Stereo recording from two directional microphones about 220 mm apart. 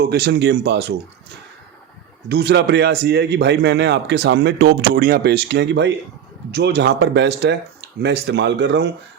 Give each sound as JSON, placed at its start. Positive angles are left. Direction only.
{"t": 0.0, "sound": "a man's voice", "side_deg": -45}
{"t": 2.3, "sound": "a man's voice", "side_deg": -50}